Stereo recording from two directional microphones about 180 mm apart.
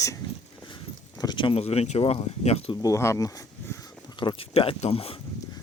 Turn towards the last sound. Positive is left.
turn(degrees=35)  # may be behind; listen again after turning